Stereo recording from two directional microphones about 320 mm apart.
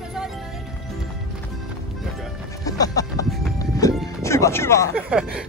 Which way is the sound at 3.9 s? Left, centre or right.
Centre.